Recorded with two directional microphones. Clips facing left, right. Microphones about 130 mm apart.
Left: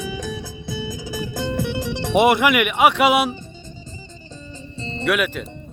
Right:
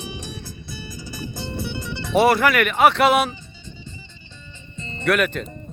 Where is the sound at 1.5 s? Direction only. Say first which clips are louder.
Left 5 dB; 90° left.